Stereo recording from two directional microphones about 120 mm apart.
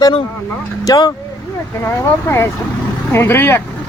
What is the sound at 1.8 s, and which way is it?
Speech, 20° left (ahead or behind).